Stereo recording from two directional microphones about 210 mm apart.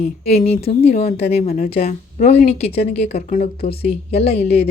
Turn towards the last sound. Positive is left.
turn(degrees=30)  # may be behind; listen again after turning